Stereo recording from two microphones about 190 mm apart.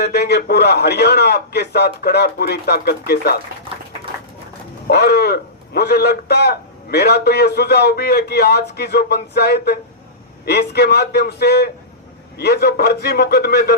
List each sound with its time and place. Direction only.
0.0 s a man's voice: 60° left (ahead or behind)
4.9 s a man's voice: 60° left (ahead or behind)